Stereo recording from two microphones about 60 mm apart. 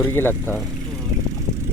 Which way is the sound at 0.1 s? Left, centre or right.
Left.